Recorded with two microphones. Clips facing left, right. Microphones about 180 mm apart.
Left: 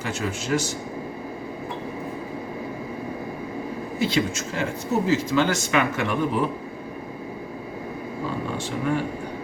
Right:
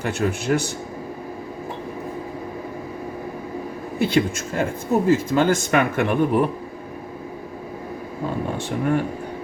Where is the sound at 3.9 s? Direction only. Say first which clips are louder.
Right 4 dB; 55° right (ahead or behind).